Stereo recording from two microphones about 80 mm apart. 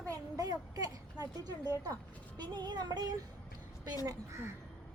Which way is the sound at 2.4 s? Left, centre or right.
Right.